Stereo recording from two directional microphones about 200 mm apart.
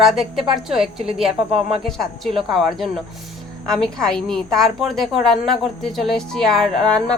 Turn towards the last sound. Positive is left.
turn(degrees=5)  # may be behind; listen again after turning